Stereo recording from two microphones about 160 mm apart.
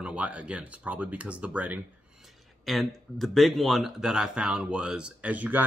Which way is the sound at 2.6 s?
Centre (ahead or behind).